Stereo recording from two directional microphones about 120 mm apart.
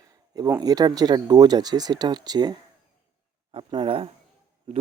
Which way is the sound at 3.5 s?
45° right (ahead or behind).